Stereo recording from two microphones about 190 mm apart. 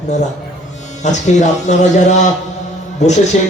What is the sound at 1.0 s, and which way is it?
A man's voice, 40° left (ahead or behind).